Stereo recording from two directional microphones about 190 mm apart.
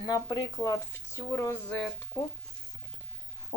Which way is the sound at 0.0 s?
20° left (ahead or behind).